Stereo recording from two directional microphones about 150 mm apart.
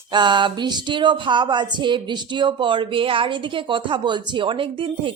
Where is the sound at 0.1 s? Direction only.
30° right (ahead or behind).